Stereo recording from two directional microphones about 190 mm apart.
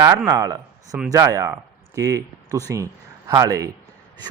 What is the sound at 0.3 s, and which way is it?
A man's voice, 15° right (ahead or behind).